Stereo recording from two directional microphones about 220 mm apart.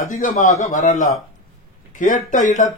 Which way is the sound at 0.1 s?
35° left (ahead or behind).